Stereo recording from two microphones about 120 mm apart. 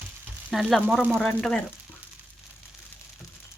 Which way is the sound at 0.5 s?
5° right (ahead or behind).